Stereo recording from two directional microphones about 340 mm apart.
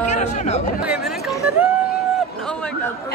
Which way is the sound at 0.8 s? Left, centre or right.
Centre.